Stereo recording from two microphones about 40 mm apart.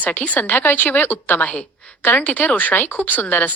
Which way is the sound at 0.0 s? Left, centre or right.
Left.